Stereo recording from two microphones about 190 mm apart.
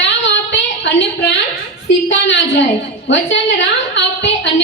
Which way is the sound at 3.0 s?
70° left (ahead or behind).